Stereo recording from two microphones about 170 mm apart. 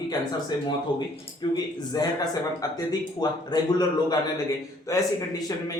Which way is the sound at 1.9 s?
20° left (ahead or behind).